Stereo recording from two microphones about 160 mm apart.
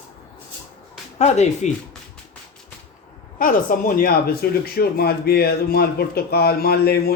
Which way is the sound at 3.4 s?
60° left (ahead or behind).